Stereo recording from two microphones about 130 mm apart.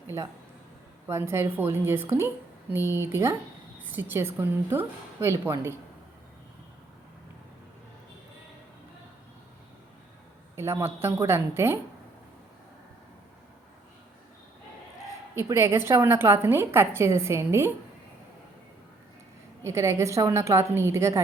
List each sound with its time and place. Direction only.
0.1 s a woman's voice: 20° right (ahead or behind)
10.5 s a woman's voice: 20° right (ahead or behind)
15.4 s a woman's voice: 20° right (ahead or behind)
19.6 s a woman's voice: 25° right (ahead or behind)